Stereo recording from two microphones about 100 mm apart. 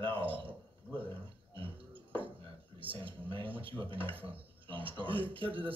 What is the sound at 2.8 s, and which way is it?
A man's voice, 60° right (ahead or behind).